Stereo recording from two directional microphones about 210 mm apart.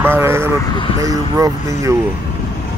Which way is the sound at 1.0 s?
15° right (ahead or behind).